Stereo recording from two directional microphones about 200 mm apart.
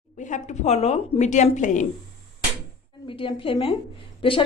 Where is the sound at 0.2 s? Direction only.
40° left (ahead or behind).